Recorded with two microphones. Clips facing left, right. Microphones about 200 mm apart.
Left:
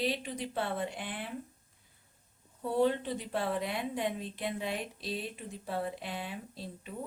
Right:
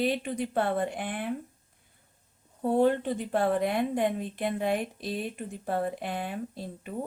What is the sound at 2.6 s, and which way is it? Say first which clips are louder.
A woman's voice: right 5 dB; 50° right (ahead or behind).